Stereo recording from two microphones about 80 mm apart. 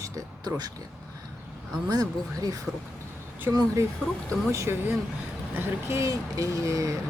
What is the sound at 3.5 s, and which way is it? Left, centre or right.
Speech, right.